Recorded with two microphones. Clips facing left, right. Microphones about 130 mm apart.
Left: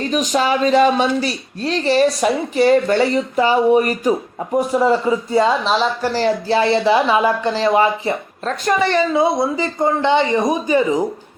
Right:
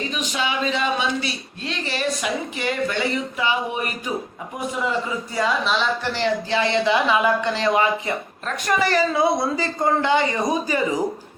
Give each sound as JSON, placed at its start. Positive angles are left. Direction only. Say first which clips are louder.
{"t": 0.0, "sound": "speech", "louder": "left 8 dB", "side_deg": 40}